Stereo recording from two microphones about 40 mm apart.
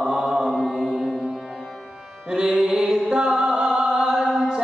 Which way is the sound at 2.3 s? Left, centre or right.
Right.